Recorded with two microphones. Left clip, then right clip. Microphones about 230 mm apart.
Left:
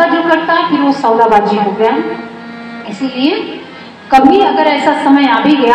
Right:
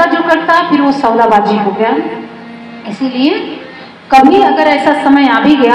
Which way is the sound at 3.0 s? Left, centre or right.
Right.